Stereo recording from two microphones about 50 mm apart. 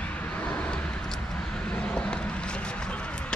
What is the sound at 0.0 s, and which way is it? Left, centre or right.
Vehicle, left.